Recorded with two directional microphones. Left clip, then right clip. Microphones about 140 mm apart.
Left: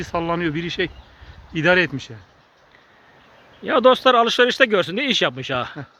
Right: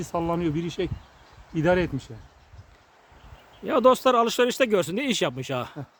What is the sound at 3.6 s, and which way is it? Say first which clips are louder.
Speech: left 5 dB; 25° right (ahead or behind).